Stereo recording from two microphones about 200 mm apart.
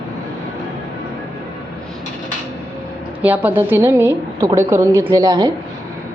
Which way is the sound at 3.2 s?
10° right (ahead or behind).